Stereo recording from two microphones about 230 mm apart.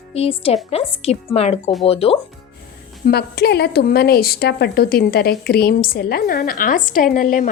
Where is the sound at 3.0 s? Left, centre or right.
Left.